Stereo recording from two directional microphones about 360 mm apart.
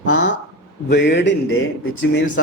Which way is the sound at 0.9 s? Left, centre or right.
Left.